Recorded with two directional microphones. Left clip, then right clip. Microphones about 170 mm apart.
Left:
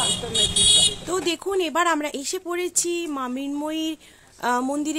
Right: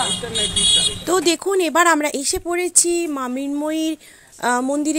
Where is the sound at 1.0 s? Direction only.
40° right (ahead or behind); by 4.9 s 25° right (ahead or behind).